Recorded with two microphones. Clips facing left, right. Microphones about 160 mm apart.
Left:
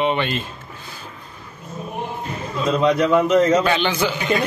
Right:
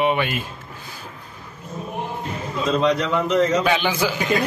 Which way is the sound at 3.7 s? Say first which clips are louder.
Left 1 dB; 10° right (ahead or behind).